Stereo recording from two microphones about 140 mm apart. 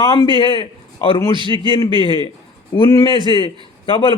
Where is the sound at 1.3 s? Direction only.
35° right (ahead or behind).